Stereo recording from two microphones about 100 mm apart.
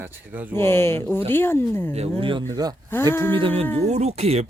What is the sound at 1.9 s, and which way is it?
Speech, 75° right (ahead or behind).